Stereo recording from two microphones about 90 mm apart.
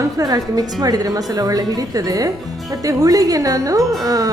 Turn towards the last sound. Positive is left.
turn(degrees=-40)  # may be behind; listen again after turning